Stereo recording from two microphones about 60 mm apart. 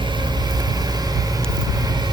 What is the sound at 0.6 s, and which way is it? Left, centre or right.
Vehicle, right.